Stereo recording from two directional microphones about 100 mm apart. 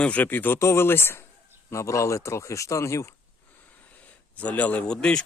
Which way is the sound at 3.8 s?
15° left (ahead or behind).